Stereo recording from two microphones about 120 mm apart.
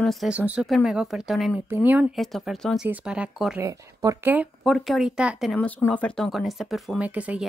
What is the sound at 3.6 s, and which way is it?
Speech, 25° right (ahead or behind).